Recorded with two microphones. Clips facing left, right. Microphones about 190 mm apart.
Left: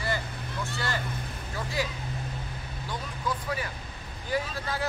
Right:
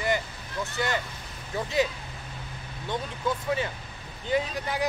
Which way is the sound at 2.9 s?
25° right (ahead or behind).